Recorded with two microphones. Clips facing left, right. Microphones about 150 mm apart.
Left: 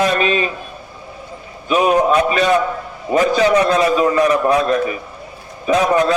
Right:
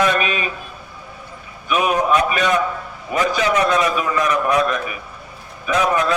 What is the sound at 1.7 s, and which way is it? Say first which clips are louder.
A man's voice: left 4 dB; 30° left (ahead or behind).